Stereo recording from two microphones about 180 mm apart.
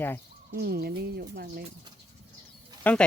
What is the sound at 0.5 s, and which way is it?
Speech, 60° right (ahead or behind).